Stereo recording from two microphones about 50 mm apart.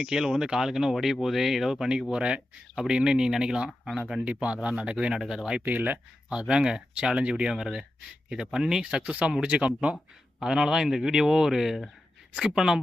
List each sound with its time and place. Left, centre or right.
0.0 s speech: centre
5.2 s speech: centre
5.6 s speech: right
6.5 s speech: centre
7.5 s speech: centre
10.4 s speech: centre